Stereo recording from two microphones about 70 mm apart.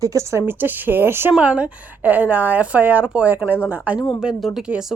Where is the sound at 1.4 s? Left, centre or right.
Centre.